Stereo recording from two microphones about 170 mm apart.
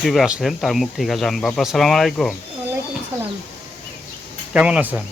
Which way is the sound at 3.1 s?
15° right (ahead or behind).